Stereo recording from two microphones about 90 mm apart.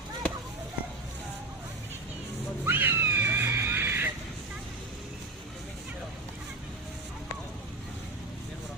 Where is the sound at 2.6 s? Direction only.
25° right (ahead or behind).